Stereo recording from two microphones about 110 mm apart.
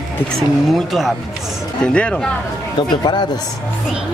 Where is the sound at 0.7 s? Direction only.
Centre (ahead or behind).